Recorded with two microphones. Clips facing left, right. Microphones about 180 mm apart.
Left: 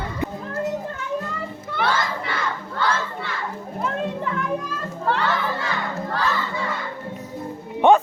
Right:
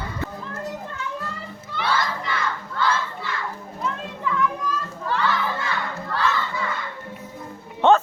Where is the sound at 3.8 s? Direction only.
55° left (ahead or behind).